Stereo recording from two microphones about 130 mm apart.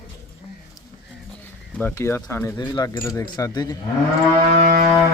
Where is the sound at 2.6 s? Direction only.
35° left (ahead or behind).